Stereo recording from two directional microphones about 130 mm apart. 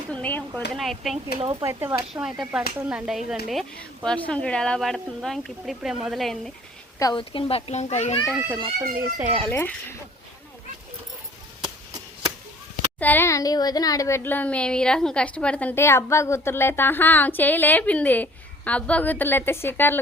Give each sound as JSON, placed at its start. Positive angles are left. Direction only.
{"t": 0.1, "sound": "a sound", "side_deg": 10}
{"t": 0.7, "sound": "speech", "side_deg": 0}
{"t": 1.4, "sound": "speech", "side_deg": -40}
{"t": 1.6, "sound": "speech", "side_deg": -20}
{"t": 2.2, "sound": "speech", "side_deg": -5}
{"t": 3.2, "sound": "speech", "side_deg": 0}
{"t": 7.0, "sound": "a child's voice", "side_deg": 35}
{"t": 9.1, "sound": "speech", "side_deg": -15}
{"t": 9.5, "sound": "a child's voice", "side_deg": 20}
{"t": 11.6, "sound": "chop", "side_deg": -30}
{"t": 13.0, "sound": "a child's voice", "side_deg": 15}
{"t": 14.2, "sound": "a woman's voice", "side_deg": 15}